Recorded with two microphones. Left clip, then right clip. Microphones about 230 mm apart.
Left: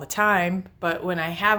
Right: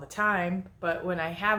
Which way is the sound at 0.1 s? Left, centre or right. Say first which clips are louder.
Left 6 dB; left.